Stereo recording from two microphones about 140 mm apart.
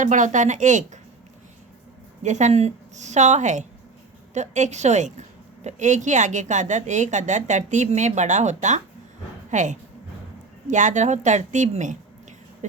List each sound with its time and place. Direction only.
0.0 s a woman's voice: 65° right (ahead or behind)
2.2 s a woman's voice: 60° right (ahead or behind)